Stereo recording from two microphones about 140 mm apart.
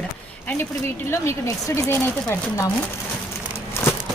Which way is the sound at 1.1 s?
20° left (ahead or behind).